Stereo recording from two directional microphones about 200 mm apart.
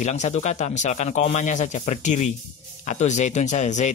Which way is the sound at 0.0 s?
35° left (ahead or behind).